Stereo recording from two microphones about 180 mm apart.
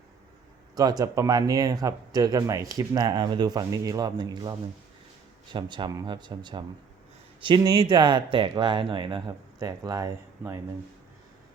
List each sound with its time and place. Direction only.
0.8 s speech: 20° right (ahead or behind)